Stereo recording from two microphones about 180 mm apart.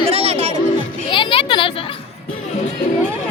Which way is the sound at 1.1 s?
25° left (ahead or behind).